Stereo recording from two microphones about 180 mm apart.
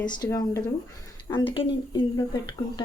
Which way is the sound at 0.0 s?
20° left (ahead or behind).